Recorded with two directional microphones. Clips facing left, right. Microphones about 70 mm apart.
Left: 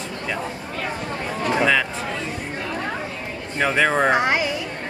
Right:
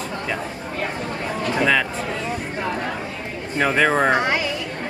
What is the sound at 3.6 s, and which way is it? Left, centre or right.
Speech, centre.